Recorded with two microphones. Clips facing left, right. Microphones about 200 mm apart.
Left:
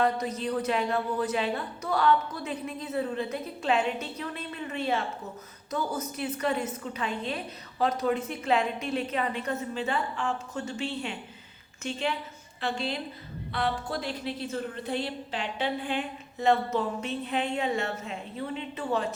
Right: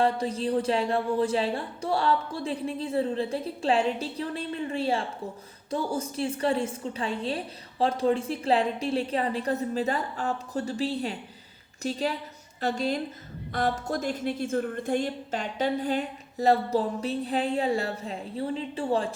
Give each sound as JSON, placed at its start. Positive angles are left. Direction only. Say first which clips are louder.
{"t": 0.0, "sound": "a woman's voice", "louder": "right 2 dB", "side_deg": -30}